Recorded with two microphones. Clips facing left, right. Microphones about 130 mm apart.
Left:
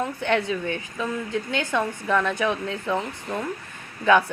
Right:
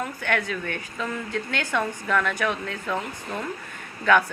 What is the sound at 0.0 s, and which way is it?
A woman's voice, 25° left (ahead or behind).